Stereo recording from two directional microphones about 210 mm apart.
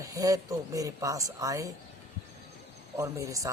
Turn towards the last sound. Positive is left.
turn(degrees=-15)  # may be behind; listen again after turning